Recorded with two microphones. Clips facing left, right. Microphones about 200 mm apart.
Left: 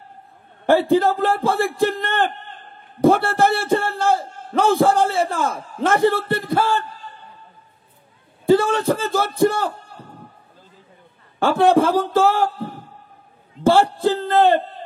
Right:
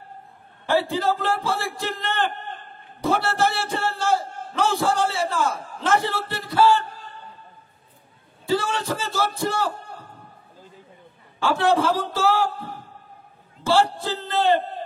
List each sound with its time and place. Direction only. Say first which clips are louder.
0.7 s a man's voice: left 6 dB; 55° left (ahead or behind)
8.5 s a man's voice: left 8 dB; 55° left (ahead or behind)
11.3 s a man's voice: left 5 dB; 55° left (ahead or behind)